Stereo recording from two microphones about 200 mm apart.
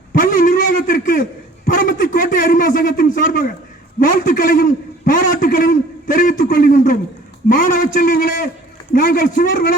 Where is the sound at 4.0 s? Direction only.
45° left (ahead or behind).